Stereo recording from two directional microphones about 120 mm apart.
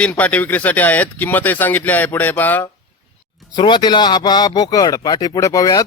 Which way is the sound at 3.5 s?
40° left (ahead or behind).